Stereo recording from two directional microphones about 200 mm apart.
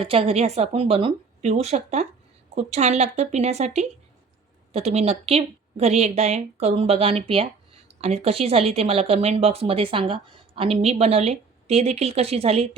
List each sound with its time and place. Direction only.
0.0 s a woman's voice: 30° right (ahead or behind)